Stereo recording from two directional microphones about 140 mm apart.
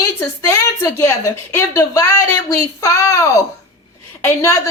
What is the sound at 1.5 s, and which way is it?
A woman's voice, 25° left (ahead or behind).